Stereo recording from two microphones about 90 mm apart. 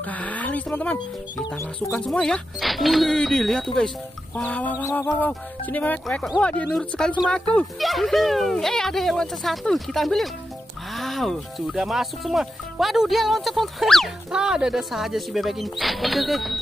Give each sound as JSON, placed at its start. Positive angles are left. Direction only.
{"t": 0.0, "sound": "a sound", "side_deg": 15}
{"t": 2.0, "sound": "speech", "side_deg": 10}
{"t": 4.4, "sound": "chicken", "side_deg": 15}
{"t": 4.9, "sound": "speech", "side_deg": 20}
{"t": 6.0, "sound": "speech", "side_deg": 5}
{"t": 6.4, "sound": "chicken", "side_deg": 15}
{"t": 7.8, "sound": "speech", "side_deg": 0}